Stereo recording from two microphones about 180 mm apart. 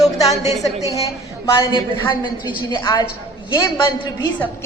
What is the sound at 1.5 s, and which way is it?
A man's voice, 25° left (ahead or behind).